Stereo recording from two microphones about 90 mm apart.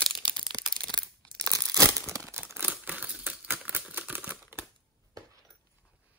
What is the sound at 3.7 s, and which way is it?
Typewriter, 20° right (ahead or behind).